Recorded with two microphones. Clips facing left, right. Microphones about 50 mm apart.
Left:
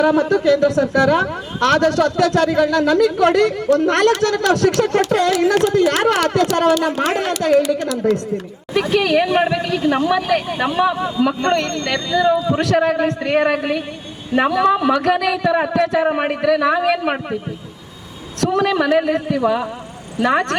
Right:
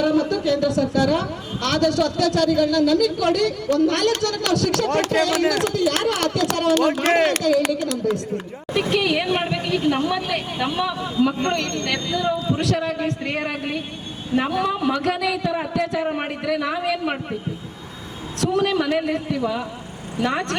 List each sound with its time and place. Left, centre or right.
0.0 s a man's voice: left
12.1 s speech: left
12.5 s a man's voice: left
18.3 s a man's voice: left